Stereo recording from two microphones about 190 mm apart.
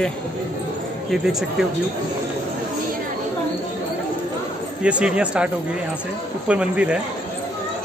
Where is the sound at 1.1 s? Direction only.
Centre (ahead or behind).